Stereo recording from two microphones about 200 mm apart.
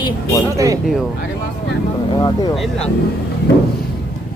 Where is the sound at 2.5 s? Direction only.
Centre (ahead or behind).